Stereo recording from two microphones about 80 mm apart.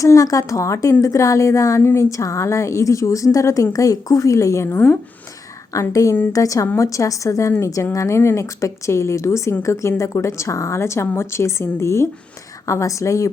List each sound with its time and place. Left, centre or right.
0.0 s a woman's voice: left
5.9 s a woman's voice: left